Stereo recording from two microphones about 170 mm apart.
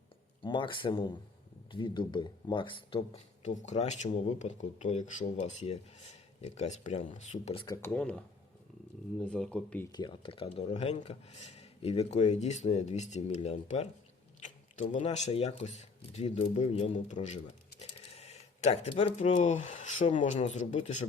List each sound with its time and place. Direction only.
0.4 s speech: 30° left (ahead or behind)
7.8 s speech: 10° left (ahead or behind)
9.2 s speech: 5° left (ahead or behind)
9.9 s speech: 25° left (ahead or behind); by 21.1 s 40° left (ahead or behind)